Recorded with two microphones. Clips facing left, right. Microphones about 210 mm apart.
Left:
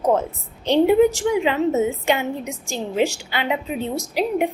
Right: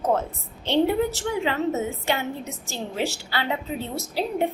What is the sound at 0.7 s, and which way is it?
A woman's voice, 15° left (ahead or behind).